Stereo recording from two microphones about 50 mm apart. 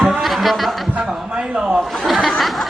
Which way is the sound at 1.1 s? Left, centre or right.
Centre.